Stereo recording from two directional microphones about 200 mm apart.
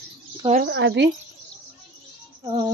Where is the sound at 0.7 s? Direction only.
70° right (ahead or behind).